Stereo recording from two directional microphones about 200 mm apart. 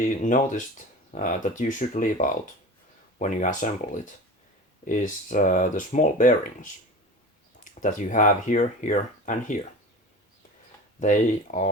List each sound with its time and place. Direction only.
0.2 s speech: 40° left (ahead or behind)
11.0 s speech: 40° left (ahead or behind)